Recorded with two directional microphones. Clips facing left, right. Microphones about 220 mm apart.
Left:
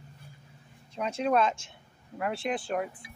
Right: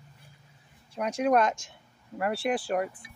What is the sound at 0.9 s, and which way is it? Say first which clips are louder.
Speech: right 3 dB; 10° right (ahead or behind).